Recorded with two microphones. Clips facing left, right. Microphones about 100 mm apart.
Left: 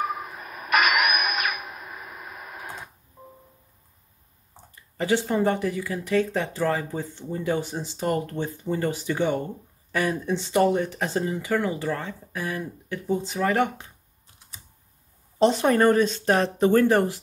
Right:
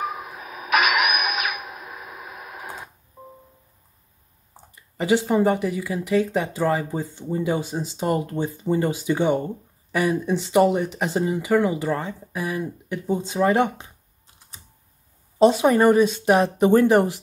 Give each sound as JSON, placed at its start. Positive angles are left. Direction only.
{"t": 0.0, "sound": "vehicle", "side_deg": -5}
{"t": 4.9, "sound": "speech", "side_deg": -15}
{"t": 15.3, "sound": "speech", "side_deg": -15}